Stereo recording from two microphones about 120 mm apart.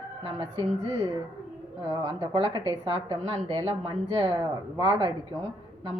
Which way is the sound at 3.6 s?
50° right (ahead or behind).